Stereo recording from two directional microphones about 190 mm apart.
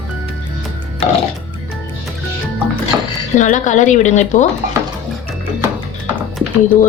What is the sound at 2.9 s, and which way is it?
Dishes, 10° right (ahead or behind).